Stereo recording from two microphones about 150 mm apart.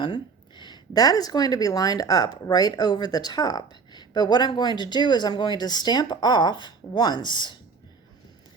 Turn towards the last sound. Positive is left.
turn(degrees=30)  # may be behind; listen again after turning